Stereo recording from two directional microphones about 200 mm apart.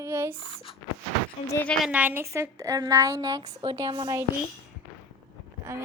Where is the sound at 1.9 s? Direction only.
10° right (ahead or behind).